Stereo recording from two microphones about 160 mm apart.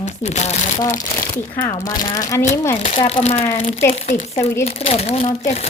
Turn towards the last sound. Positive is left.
turn(degrees=40)  # may be behind; listen again after turning